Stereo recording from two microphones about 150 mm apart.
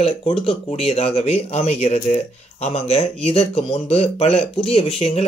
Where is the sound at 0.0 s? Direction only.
35° left (ahead or behind).